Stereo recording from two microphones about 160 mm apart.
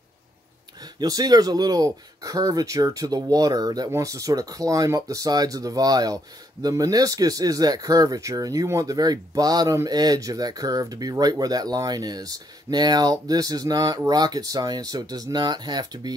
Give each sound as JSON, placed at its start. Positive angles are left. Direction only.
{"t": 0.9, "sound": "speech", "side_deg": -25}